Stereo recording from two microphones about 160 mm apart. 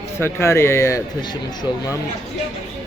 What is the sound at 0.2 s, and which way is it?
Speech, 15° left (ahead or behind).